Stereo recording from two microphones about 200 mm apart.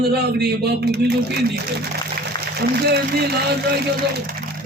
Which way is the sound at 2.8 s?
55° right (ahead or behind).